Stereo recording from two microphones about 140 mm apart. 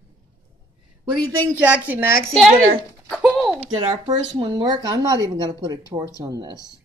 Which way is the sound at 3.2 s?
10° right (ahead or behind).